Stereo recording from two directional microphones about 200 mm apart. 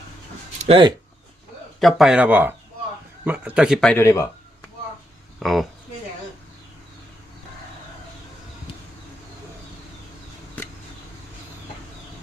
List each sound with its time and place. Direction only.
0.6 s speech: 25° right (ahead or behind)
1.8 s speech: centre (ahead or behind); by 4.3 s 15° left (ahead or behind)
5.4 s speech: centre (ahead or behind)
10.6 s a sound: 10° left (ahead or behind)